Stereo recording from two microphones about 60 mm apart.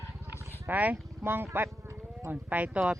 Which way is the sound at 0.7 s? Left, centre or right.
Right.